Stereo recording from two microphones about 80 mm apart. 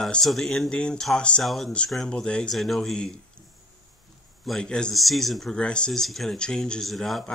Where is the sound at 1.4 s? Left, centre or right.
Centre.